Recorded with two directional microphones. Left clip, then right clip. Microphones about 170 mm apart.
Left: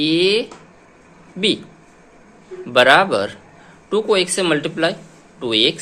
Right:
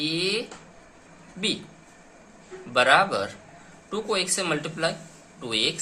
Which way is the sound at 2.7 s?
50° left (ahead or behind).